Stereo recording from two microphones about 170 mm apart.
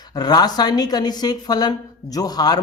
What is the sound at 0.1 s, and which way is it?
Speech, 25° left (ahead or behind).